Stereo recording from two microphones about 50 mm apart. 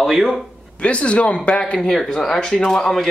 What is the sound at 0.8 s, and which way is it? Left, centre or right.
Speech, left.